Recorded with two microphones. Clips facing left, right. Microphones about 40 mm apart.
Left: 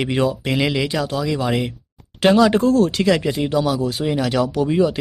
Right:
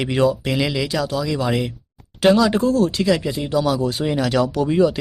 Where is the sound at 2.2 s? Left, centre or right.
Left.